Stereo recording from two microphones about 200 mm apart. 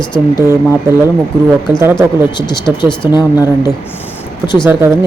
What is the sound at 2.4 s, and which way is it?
Speech, 20° left (ahead or behind).